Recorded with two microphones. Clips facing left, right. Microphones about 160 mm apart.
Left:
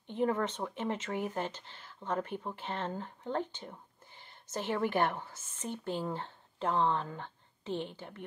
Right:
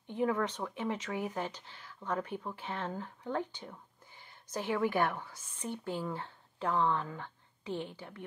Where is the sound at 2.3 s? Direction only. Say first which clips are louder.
Left 1 dB; 25° left (ahead or behind).